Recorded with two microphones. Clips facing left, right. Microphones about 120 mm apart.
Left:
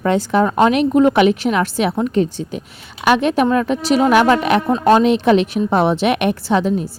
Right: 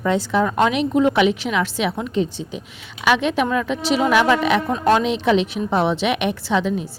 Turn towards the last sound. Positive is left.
turn(degrees=45)  # may be behind; listen again after turning